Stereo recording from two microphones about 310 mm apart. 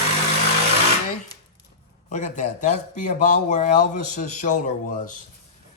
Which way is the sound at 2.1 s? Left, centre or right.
Left.